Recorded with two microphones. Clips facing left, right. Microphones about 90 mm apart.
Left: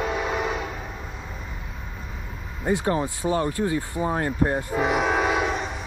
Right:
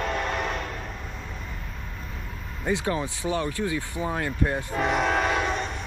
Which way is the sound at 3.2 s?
90° left.